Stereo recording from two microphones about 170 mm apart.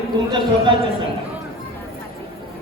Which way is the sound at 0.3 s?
30° right (ahead or behind).